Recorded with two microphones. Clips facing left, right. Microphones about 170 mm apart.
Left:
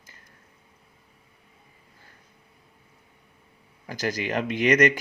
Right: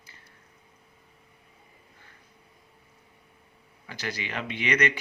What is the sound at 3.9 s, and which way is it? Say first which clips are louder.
Speech: left 7 dB; 45° left (ahead or behind).